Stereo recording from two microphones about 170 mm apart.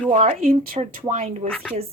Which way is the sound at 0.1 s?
45° right (ahead or behind).